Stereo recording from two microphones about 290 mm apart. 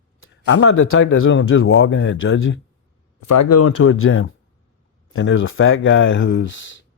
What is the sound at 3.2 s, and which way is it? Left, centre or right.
Speech, left.